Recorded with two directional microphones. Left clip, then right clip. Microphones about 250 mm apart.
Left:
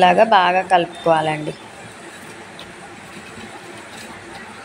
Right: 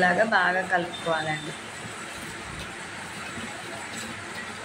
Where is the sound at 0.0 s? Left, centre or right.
Left.